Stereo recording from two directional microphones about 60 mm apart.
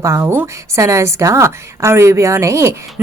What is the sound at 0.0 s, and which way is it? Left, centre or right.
Speech, right.